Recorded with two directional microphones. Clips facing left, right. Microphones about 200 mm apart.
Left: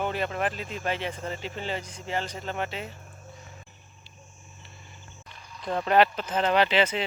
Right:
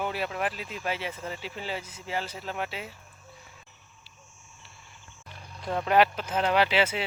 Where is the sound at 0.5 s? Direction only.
50° left (ahead or behind).